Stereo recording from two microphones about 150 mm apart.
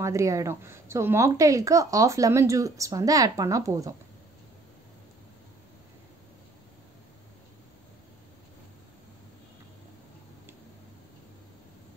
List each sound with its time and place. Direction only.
0.0 s speech: 20° right (ahead or behind)